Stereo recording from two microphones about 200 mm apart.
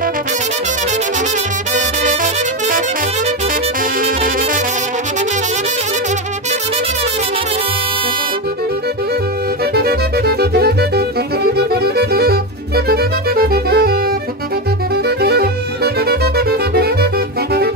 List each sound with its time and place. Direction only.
9.8 s music: 50° right (ahead or behind)
15.0 s music: 50° right (ahead or behind)